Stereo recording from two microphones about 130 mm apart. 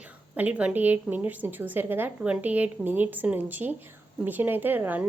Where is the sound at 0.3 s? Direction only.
10° right (ahead or behind).